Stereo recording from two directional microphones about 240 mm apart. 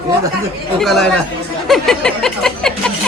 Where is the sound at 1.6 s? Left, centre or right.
Centre.